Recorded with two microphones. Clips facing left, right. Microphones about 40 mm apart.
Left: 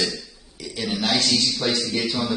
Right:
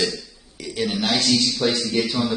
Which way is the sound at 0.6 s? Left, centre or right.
Right.